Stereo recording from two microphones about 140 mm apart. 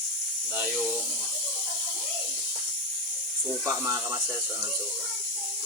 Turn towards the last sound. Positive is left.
turn(degrees=-20)  # may be behind; listen again after turning